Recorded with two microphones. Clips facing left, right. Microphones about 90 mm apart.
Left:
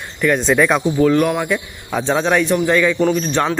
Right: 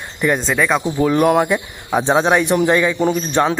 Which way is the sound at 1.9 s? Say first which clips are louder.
Right 2 dB; 20° right (ahead or behind).